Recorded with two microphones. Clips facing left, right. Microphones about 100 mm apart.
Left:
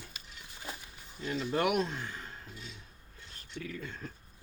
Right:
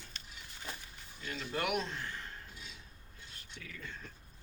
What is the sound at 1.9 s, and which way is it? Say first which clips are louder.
Speech: left 2 dB; 15° left (ahead or behind).